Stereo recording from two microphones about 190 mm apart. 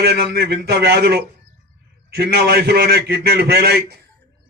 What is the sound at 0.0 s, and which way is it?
A man's voice, 60° right (ahead or behind).